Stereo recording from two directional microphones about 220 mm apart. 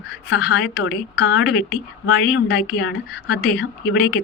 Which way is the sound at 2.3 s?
55° left (ahead or behind).